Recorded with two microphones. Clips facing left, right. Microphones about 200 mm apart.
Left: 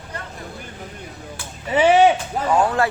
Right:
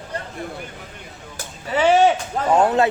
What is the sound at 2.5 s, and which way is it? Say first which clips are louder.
Speech: right 3 dB; 20° right (ahead or behind).